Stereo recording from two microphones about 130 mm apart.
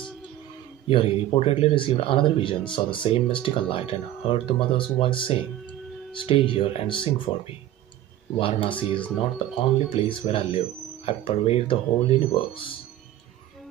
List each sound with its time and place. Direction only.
0.8 s speech: 45° left (ahead or behind)
8.4 s speech: 45° left (ahead or behind)